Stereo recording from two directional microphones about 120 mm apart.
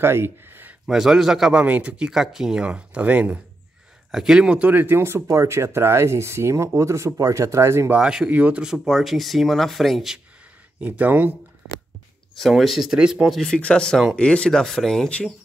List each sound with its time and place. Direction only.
0.0 s speech: 20° right (ahead or behind)
0.8 s a man's voice: 5° right (ahead or behind); by 8.0 s 25° right (ahead or behind)
8.0 s speech: 5° right (ahead or behind)
10.8 s a man's voice: 15° right (ahead or behind)
12.4 s speech: centre (ahead or behind)